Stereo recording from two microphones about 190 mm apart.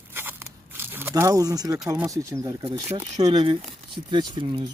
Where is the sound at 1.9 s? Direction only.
15° right (ahead or behind).